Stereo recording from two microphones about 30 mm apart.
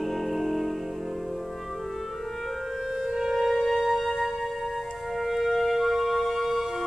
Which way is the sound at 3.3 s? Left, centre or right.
Centre.